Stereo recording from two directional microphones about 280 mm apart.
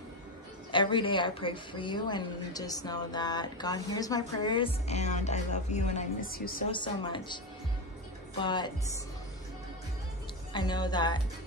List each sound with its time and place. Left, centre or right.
0.7 s a woman's voice: centre
6.7 s a woman's voice: centre
8.4 s a woman's voice: centre
10.5 s a woman's voice: centre